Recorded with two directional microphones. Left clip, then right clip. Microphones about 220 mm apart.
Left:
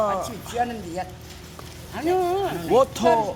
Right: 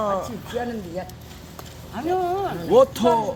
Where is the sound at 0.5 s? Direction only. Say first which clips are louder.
Left 2 dB; 50° left (ahead or behind).